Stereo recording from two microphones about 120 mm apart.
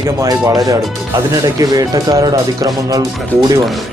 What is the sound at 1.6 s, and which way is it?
Speech, 30° right (ahead or behind).